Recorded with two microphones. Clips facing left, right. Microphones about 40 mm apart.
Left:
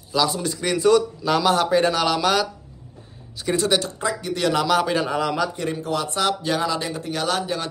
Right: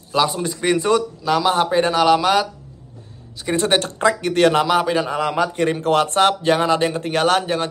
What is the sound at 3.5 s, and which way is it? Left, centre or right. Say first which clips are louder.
Speech: right 4 dB; right.